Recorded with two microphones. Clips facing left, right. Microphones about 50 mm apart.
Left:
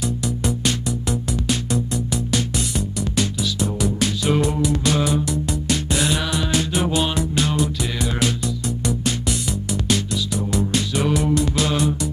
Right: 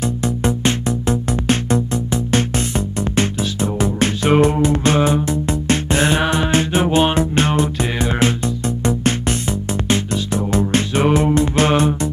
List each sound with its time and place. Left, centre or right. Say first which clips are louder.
0.0 s music: right 4 dB; right